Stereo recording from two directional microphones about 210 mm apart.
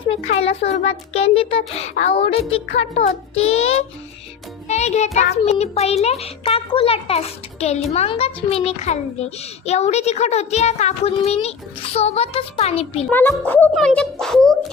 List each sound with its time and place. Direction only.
0.1 s a child's voice: 30° left (ahead or behind)
13.1 s a child's voice: 5° left (ahead or behind)